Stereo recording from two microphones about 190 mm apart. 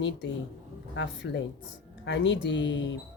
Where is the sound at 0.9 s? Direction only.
65° left (ahead or behind).